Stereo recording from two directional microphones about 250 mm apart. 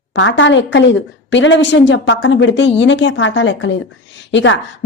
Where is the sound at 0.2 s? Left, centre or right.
Left.